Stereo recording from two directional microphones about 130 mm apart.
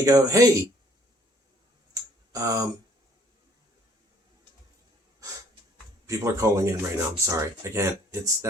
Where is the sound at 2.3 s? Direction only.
25° right (ahead or behind).